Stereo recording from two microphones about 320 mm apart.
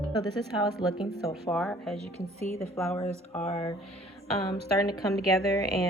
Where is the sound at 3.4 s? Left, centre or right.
Centre.